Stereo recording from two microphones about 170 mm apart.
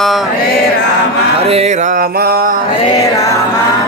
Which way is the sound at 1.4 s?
40° right (ahead or behind).